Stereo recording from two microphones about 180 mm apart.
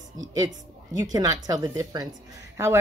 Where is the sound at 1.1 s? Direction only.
20° right (ahead or behind).